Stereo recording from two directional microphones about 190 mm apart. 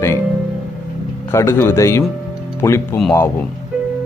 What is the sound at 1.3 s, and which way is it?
Speech, 15° left (ahead or behind).